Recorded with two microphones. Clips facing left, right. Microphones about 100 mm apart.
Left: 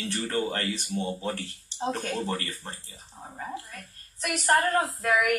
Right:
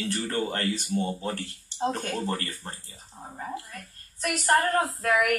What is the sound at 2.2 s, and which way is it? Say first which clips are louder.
Speech: right 1 dB; 35° right (ahead or behind).